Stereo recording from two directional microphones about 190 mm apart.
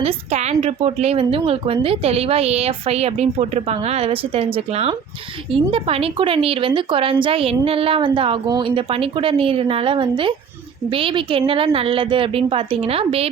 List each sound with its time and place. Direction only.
0.0 s a woman's voice: 35° right (ahead or behind)